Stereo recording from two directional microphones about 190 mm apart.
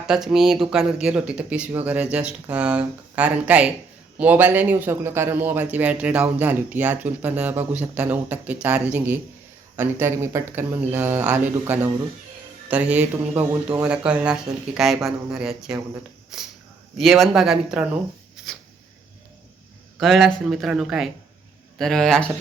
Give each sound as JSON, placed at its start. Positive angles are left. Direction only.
{"t": 0.1, "sound": "a man's voice", "side_deg": 0}
{"t": 20.0, "sound": "speech", "side_deg": 0}